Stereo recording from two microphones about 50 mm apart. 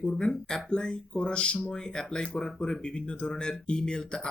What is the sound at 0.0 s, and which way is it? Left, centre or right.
Speech, centre.